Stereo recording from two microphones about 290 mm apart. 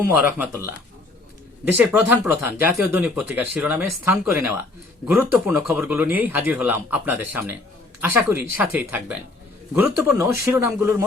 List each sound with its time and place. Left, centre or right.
0.1 s speech: centre
1.8 s speech: centre